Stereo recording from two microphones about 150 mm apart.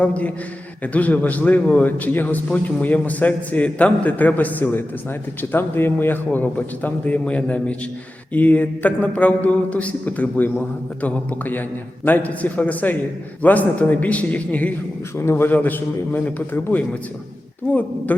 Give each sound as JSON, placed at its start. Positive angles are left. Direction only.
{"t": 0.0, "sound": "a man's voice", "side_deg": 10}